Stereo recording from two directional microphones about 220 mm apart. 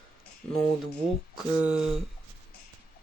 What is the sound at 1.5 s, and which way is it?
Speech, 5° right (ahead or behind).